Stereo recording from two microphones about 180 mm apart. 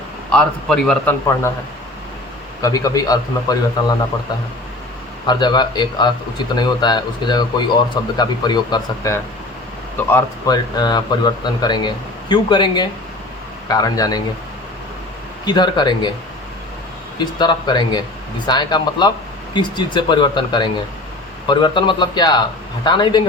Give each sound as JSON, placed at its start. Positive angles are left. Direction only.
{"t": 0.3, "sound": "a man's voice", "side_deg": 5}
{"t": 2.6, "sound": "speech", "side_deg": 20}
{"t": 5.2, "sound": "speech", "side_deg": 25}
{"t": 15.4, "sound": "speech", "side_deg": 25}
{"t": 17.2, "sound": "speech", "side_deg": 25}